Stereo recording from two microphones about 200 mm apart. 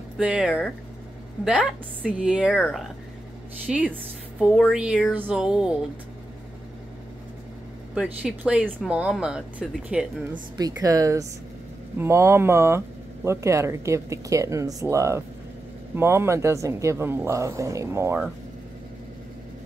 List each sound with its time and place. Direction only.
0.2 s a woman's voice: 5° right (ahead or behind)
3.6 s a woman's voice: 5° right (ahead or behind)
7.9 s a woman's voice: 5° right (ahead or behind)
10.8 s speech: 15° right (ahead or behind)